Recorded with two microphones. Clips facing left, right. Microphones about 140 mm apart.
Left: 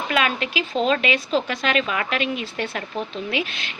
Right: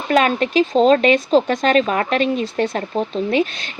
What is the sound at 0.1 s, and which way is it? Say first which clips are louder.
Speech: right 9 dB; 40° right (ahead or behind).